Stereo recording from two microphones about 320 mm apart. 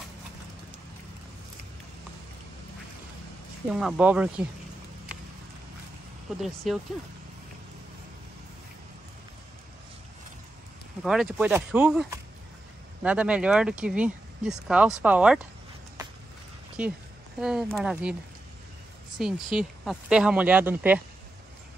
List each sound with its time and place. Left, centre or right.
3.7 s speech: centre
6.4 s speech: centre
11.0 s speech: centre
16.8 s speech: centre
19.1 s speech: centre